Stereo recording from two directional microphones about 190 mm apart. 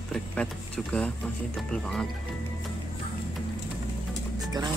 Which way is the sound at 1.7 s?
5° left (ahead or behind).